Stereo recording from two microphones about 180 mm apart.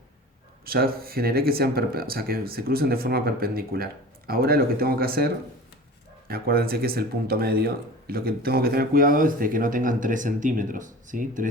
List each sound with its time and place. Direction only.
0.6 s speech: 55° right (ahead or behind)